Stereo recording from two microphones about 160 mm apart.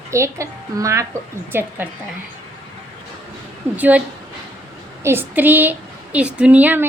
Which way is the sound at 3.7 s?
10° right (ahead or behind).